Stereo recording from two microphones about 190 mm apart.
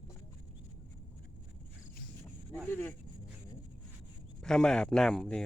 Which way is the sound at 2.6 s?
10° left (ahead or behind).